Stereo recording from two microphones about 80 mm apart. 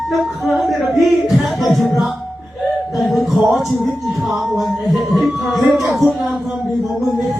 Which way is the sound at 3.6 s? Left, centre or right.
Centre.